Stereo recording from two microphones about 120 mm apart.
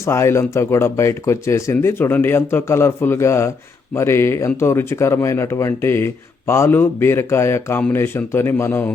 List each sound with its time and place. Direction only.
0.0 s speech: 25° left (ahead or behind)